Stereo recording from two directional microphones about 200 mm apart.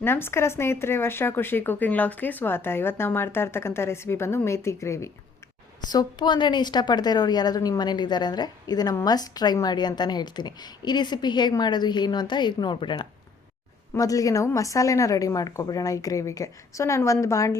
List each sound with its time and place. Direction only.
0.0 s a woman's voice: 10° left (ahead or behind)